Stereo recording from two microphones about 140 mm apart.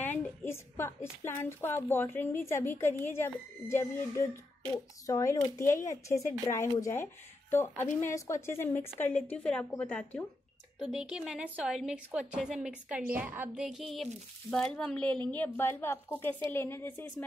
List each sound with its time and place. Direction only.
0.0 s a sound: 15° left (ahead or behind)
1.2 s speech: 15° left (ahead or behind)
10.8 s a woman's voice: 5° right (ahead or behind)
13.7 s a woman's voice: centre (ahead or behind); by 17.0 s 15° left (ahead or behind)